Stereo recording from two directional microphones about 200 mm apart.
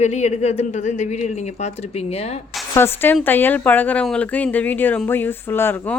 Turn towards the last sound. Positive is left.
turn(degrees=10)  # may be behind; listen again after turning